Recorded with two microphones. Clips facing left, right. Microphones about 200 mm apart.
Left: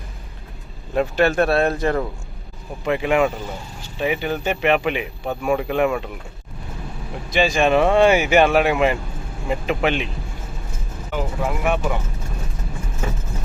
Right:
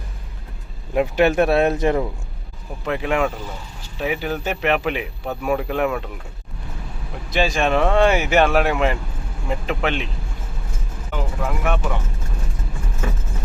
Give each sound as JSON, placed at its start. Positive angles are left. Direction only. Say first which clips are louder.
{"t": 0.9, "sound": "speech", "louder": "right 1 dB", "side_deg": -15}
{"t": 2.8, "sound": "speech", "louder": "left 3 dB", "side_deg": 5}
{"t": 7.3, "sound": "speech", "louder": "left 2 dB", "side_deg": 0}
{"t": 11.1, "sound": "speech", "louder": "left 2 dB", "side_deg": 5}